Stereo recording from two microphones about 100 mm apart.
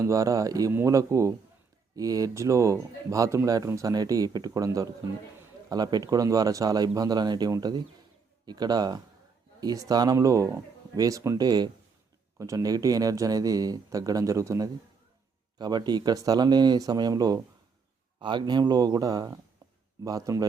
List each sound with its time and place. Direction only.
0.0 s speech: 35° right (ahead or behind)
15.5 s speech: 45° right (ahead or behind)
18.2 s speech: 50° right (ahead or behind); by 20.4 s 35° right (ahead or behind)